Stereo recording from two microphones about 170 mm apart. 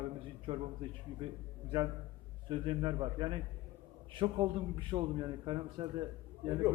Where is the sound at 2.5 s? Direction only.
30° right (ahead or behind).